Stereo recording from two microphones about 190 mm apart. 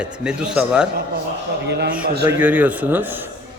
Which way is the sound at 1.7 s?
60° right (ahead or behind).